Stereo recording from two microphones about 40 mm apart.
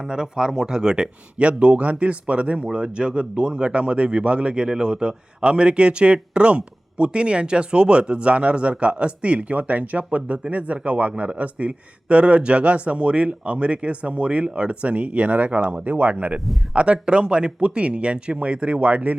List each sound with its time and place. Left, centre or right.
0.0 s a man's voice: centre; by 19.1 s right